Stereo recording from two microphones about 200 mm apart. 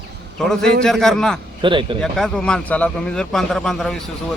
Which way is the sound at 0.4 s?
5° left (ahead or behind).